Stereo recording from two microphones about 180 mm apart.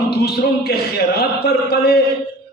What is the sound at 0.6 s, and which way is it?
A man's voice, 65° left (ahead or behind).